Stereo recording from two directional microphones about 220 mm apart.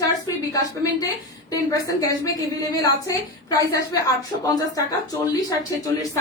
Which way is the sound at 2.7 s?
15° left (ahead or behind).